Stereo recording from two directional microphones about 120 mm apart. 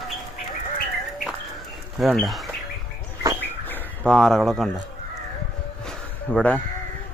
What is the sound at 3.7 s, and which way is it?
Bird, 15° left (ahead or behind).